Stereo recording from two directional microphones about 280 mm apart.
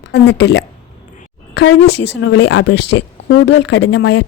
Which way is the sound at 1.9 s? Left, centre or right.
Left.